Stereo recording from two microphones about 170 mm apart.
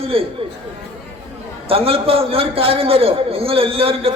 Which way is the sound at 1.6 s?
35° right (ahead or behind).